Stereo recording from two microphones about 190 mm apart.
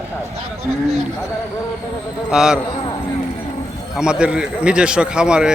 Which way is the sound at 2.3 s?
5° right (ahead or behind).